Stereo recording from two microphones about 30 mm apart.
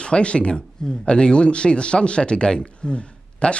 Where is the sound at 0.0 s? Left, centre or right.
Left.